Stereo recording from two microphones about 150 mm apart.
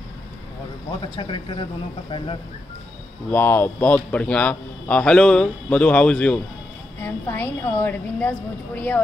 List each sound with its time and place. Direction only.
1.1 s speech: 35° left (ahead or behind)
3.3 s a man's voice: 15° left (ahead or behind)